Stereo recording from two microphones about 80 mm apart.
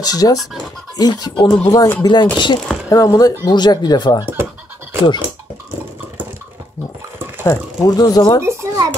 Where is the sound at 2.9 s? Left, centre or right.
Left.